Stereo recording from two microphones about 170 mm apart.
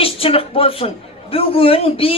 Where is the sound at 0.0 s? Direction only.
35° left (ahead or behind).